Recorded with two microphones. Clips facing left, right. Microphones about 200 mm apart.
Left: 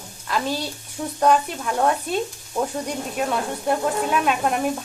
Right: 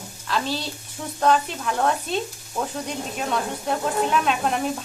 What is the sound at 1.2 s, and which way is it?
Sizzle, 10° left (ahead or behind).